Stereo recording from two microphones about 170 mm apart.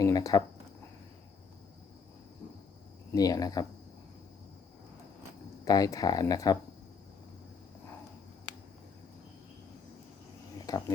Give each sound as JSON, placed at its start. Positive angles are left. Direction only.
{"t": 0.0, "sound": "speech", "side_deg": 20}
{"t": 3.1, "sound": "speech", "side_deg": 20}
{"t": 5.6, "sound": "speech", "side_deg": 20}
{"t": 10.7, "sound": "speech", "side_deg": 20}